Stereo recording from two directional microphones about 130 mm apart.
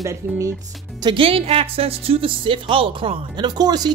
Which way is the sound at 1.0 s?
40° right (ahead or behind).